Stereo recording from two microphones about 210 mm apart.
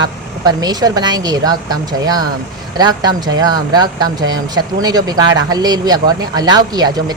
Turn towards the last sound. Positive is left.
turn(degrees=-20)  # may be behind; listen again after turning